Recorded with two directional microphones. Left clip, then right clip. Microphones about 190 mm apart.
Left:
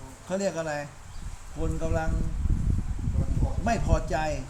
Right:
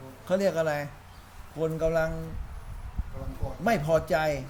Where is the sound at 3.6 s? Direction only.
40° right (ahead or behind).